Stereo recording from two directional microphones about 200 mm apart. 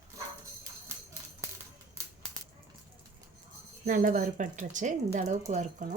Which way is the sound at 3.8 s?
40° right (ahead or behind).